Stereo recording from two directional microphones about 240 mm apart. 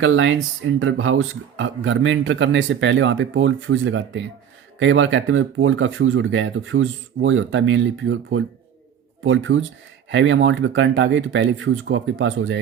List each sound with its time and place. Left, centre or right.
0.0 s speech: right